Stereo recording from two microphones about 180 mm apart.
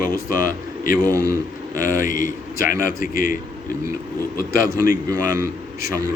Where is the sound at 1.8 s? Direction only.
45° left (ahead or behind).